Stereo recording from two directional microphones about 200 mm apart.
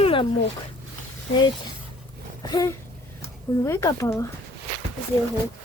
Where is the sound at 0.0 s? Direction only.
25° left (ahead or behind).